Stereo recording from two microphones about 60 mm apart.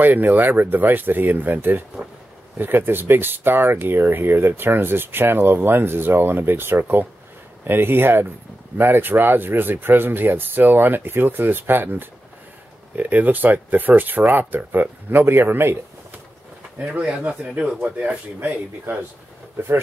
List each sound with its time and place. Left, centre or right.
0.0 s speech: right
16.7 s speech: right